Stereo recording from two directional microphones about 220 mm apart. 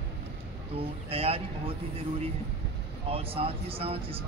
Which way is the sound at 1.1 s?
25° right (ahead or behind).